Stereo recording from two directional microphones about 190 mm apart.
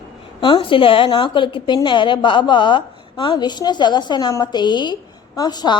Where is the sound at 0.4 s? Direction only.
25° left (ahead or behind).